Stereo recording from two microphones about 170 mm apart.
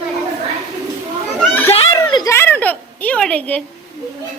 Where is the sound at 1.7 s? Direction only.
20° left (ahead or behind); by 3.6 s 5° left (ahead or behind).